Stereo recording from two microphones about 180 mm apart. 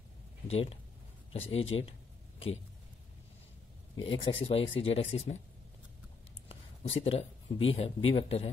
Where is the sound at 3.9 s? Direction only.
30° left (ahead or behind).